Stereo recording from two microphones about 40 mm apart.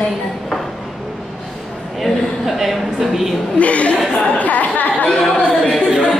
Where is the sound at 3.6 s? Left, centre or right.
Left.